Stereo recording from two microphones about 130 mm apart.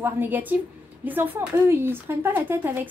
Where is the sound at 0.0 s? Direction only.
15° right (ahead or behind).